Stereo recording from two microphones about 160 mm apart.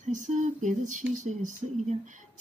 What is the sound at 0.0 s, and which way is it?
Speech, 50° right (ahead or behind).